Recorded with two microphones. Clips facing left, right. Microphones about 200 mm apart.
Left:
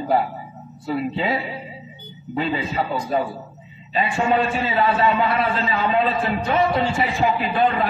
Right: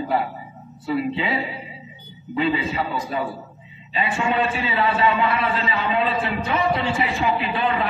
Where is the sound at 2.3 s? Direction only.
40° left (ahead or behind).